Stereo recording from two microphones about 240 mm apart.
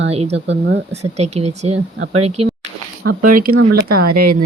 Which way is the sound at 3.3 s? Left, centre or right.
Right.